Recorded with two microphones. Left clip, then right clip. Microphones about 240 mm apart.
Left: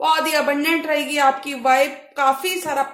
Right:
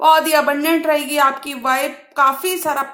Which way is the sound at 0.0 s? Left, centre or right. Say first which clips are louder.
Right 5 dB; right.